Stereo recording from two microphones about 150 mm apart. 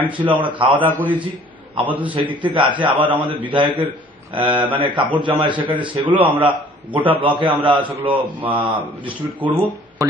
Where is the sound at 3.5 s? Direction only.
35° right (ahead or behind).